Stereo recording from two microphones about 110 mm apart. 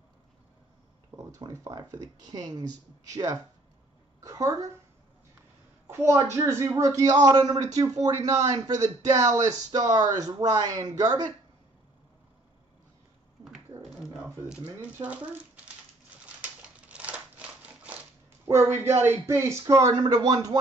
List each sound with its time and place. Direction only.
1.1 s speech: 30° right (ahead or behind)
5.9 s a woman's voice: 25° right (ahead or behind)
13.9 s a sound: 5° right (ahead or behind)
14.8 s speech: 10° right (ahead or behind)
16.3 s a sound: 10° right (ahead or behind)
18.5 s speech: 25° right (ahead or behind)